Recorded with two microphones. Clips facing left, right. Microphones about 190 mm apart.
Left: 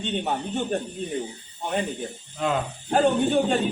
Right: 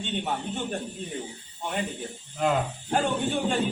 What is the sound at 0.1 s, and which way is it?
Speech, 40° left (ahead or behind).